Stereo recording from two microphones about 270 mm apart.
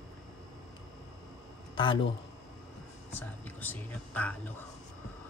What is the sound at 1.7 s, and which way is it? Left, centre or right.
Speech, centre.